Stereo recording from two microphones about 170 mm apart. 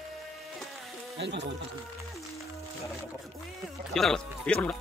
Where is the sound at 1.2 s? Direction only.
90° right.